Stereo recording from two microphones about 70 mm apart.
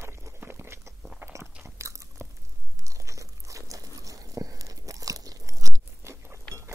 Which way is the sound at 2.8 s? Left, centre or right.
Right.